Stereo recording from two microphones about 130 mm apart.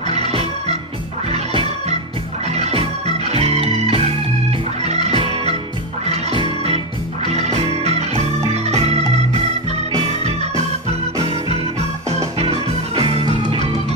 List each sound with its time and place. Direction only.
0.3 s organ: 50° right (ahead or behind)
2.5 s music: 55° right (ahead or behind)
6.3 s music: 50° right (ahead or behind)
11.2 s music: 55° right (ahead or behind)